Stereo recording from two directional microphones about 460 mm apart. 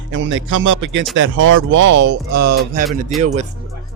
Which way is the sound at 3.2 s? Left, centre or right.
Centre.